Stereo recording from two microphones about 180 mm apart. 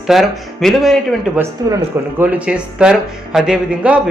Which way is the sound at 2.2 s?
5° right (ahead or behind).